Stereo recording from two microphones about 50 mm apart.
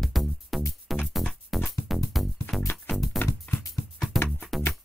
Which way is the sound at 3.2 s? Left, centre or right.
Left.